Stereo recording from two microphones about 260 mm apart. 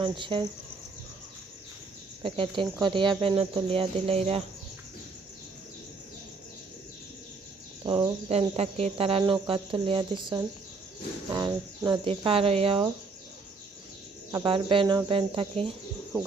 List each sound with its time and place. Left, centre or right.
0.0 s speech: centre
2.2 s speech: centre
7.9 s speech: centre
14.3 s speech: centre